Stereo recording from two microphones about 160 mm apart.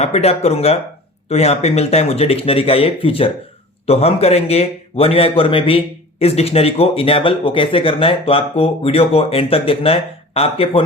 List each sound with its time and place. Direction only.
0.0 s a man's voice: 40° left (ahead or behind)